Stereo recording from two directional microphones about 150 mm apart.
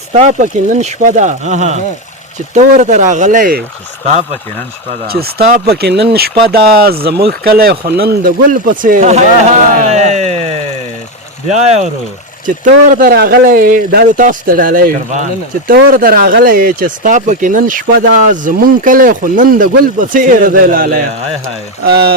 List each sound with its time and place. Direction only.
0.1 s speech: 55° right (ahead or behind)
5.0 s speech: 90° right; by 10.4 s 50° right (ahead or behind)
11.5 s speech: 50° right (ahead or behind)
12.6 s speech: 65° right (ahead or behind)
21.8 s speech: 90° right